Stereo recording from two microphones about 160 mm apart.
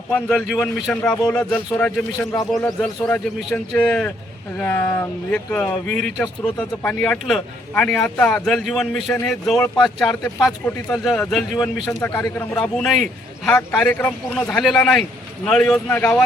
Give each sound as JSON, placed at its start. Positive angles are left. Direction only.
{"t": 0.1, "sound": "a man's voice", "side_deg": 0}
{"t": 11.6, "sound": "a man's voice", "side_deg": 15}
{"t": 12.4, "sound": "a man's voice", "side_deg": 5}